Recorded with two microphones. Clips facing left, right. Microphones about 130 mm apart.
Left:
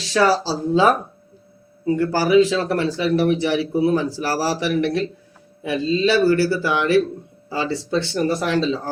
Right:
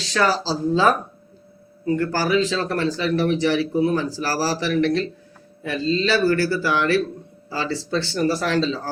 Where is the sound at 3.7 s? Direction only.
25° left (ahead or behind).